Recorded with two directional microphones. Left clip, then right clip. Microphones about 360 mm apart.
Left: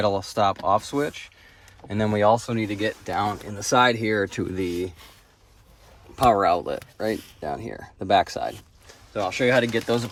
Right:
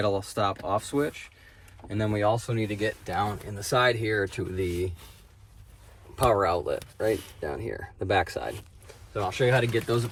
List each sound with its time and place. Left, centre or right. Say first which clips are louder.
0.0 s speech: left 5 dB; centre
6.1 s speech: left 5 dB; centre